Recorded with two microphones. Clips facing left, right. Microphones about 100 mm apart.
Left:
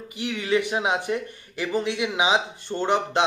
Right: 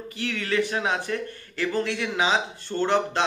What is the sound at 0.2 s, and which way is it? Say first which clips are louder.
Speech: left 2 dB; 15° left (ahead or behind).